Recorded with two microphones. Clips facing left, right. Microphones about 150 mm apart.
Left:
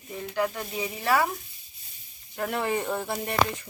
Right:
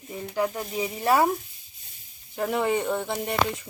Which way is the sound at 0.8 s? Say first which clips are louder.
Right 3 dB; 25° right (ahead or behind).